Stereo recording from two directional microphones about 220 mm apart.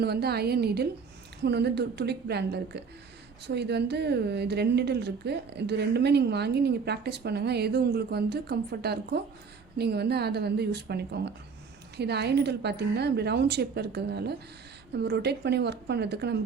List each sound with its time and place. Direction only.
0.0 s a woman's voice: 45° right (ahead or behind)